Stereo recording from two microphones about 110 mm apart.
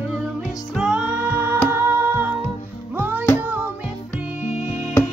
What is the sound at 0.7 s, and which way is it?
Music, 5° right (ahead or behind).